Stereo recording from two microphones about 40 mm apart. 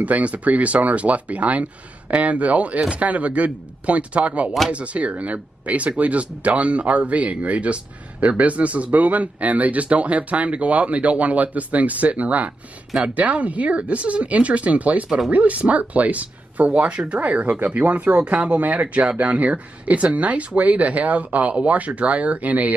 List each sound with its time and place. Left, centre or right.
0.0 s speech: right
15.0 s speech: centre
15.3 s speech: right